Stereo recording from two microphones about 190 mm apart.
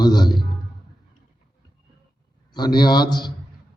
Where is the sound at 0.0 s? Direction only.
20° left (ahead or behind).